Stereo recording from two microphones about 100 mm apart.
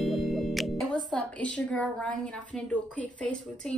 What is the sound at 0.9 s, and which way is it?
A woman's voice, 5° left (ahead or behind).